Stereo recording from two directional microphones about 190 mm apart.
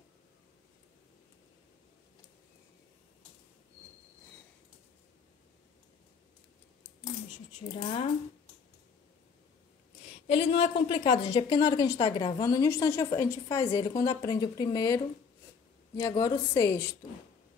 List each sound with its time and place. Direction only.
7.7 s speech: 30° left (ahead or behind)
10.2 s a woman's voice: 30° left (ahead or behind)
16.0 s a woman's voice: 20° left (ahead or behind)